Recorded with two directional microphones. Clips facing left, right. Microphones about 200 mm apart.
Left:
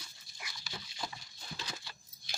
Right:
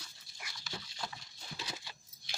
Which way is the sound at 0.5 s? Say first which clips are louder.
Right 2 dB; 10° left (ahead or behind).